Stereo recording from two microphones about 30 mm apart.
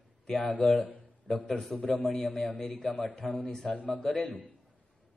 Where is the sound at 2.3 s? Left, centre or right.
Left.